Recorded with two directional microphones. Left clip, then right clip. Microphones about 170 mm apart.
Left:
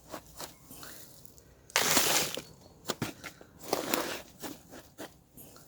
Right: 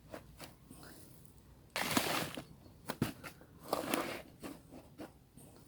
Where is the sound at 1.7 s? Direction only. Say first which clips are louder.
Left 10 dB; 30° left (ahead or behind).